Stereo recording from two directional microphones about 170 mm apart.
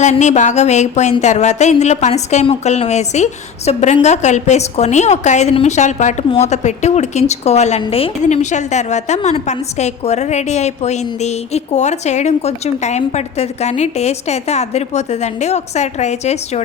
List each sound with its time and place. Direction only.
0.0 s a woman's voice: 45° left (ahead or behind)